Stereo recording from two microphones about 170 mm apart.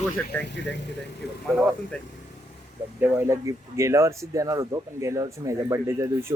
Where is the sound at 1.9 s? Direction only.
5° left (ahead or behind).